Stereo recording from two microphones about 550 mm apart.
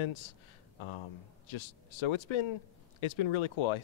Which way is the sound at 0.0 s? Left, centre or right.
Left.